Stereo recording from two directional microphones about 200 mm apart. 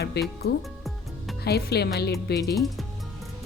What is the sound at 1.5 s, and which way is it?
Speech, 55° left (ahead or behind).